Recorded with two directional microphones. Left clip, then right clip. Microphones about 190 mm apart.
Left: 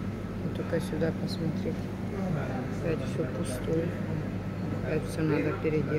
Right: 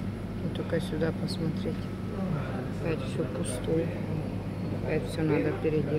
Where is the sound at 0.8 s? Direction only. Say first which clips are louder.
Left 1 dB; centre (ahead or behind).